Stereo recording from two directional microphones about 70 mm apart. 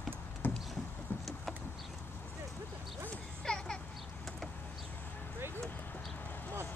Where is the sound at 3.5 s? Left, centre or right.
Centre.